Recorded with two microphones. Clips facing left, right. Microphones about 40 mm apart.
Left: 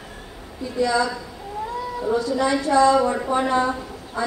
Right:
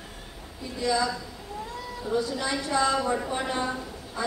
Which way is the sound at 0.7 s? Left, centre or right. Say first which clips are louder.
Left 6 dB; left.